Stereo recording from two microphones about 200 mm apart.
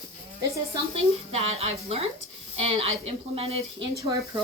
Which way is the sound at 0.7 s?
30° right (ahead or behind).